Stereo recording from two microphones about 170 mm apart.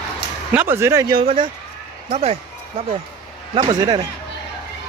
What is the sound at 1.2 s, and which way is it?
A man's voice, 30° right (ahead or behind).